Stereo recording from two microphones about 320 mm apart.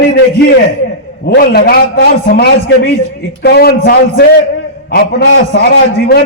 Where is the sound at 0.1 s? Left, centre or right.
Left.